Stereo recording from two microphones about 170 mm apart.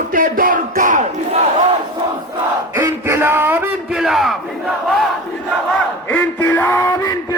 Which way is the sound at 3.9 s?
Centre (ahead or behind).